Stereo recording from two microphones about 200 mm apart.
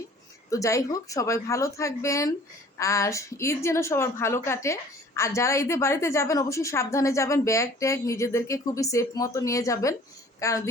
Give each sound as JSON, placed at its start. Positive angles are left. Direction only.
{"t": 0.5, "sound": "a woman's voice", "side_deg": 15}